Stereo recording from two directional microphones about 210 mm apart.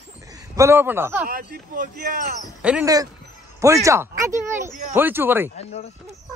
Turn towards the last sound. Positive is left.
turn(degrees=30)  # may be behind; listen again after turning